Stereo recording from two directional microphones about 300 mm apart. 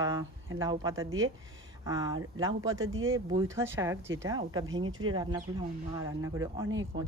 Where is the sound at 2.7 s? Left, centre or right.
Right.